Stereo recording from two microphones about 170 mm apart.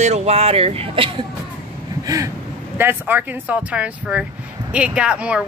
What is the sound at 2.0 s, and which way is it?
Vehicle, 20° right (ahead or behind).